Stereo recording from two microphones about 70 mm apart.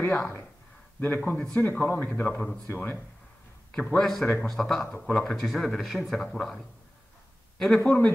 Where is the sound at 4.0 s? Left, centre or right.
Centre.